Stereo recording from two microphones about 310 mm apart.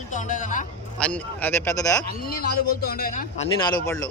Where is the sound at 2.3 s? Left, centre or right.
Left; by 3.9 s centre.